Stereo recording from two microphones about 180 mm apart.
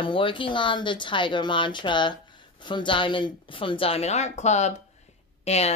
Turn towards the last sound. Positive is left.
turn(degrees=35)  # may be behind; listen again after turning